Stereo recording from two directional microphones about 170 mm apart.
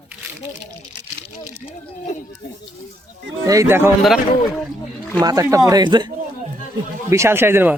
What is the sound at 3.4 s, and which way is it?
Speech, 20° right (ahead or behind).